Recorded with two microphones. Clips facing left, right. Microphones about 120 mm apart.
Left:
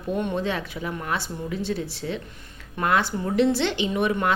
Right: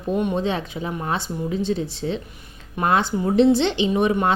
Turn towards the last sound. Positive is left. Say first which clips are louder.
# right 4 dB
turn(degrees=-25)  # may be behind; listen again after turning